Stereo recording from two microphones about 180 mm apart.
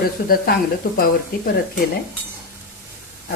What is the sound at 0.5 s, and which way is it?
Speech, 55° left (ahead or behind).